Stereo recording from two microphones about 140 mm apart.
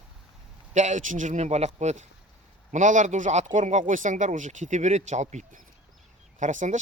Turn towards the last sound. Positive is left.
turn(degrees=-60)  # may be behind; listen again after turning